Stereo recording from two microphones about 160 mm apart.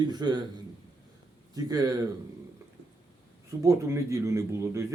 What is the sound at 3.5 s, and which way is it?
Speech, 20° right (ahead or behind).